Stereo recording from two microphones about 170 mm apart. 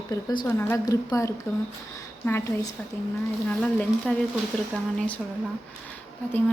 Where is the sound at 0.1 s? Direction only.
25° left (ahead or behind).